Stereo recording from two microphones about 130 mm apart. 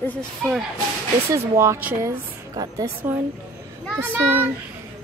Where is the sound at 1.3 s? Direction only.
20° right (ahead or behind).